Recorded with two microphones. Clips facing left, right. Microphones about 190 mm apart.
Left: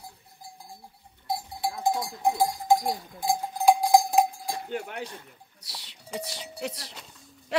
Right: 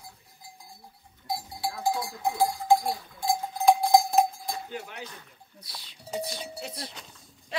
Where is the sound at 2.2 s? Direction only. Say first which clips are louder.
Left 2 dB; 15° left (ahead or behind).